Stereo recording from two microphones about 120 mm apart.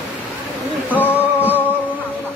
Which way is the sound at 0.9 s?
15° left (ahead or behind).